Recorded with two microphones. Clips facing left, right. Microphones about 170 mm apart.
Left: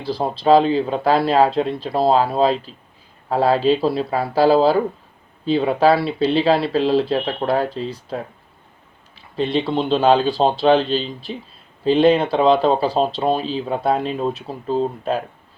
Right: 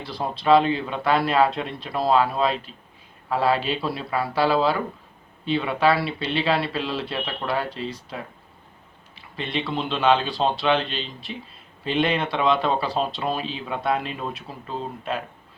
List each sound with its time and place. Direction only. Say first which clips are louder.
0.0 s speech: left 6 dB; 30° left (ahead or behind)
9.4 s speech: left 8 dB; 35° left (ahead or behind)